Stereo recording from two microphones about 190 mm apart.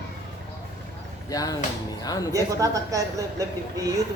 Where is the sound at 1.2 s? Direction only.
20° left (ahead or behind).